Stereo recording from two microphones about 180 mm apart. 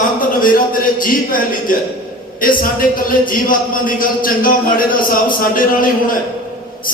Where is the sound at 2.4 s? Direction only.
50° left (ahead or behind).